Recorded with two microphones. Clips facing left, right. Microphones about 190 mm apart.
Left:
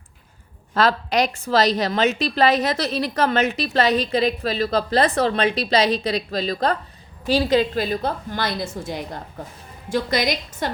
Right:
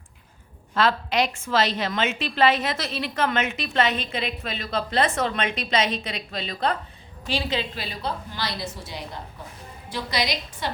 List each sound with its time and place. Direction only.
0.7 s a woman's voice: 40° left (ahead or behind)